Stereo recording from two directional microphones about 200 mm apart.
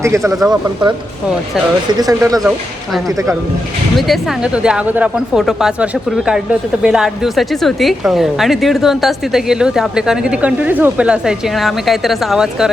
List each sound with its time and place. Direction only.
0.0 s speech: 15° right (ahead or behind)
0.3 s speech: centre (ahead or behind)
1.9 s speech: 20° right (ahead or behind)
3.9 s speech: centre (ahead or behind)